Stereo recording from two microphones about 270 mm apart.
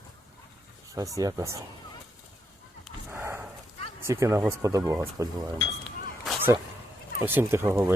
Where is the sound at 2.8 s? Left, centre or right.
Centre.